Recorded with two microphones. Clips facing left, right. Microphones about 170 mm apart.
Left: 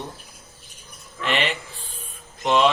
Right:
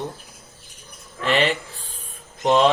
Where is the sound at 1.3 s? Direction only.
40° right (ahead or behind).